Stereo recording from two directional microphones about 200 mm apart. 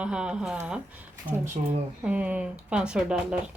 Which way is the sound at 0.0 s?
5° right (ahead or behind).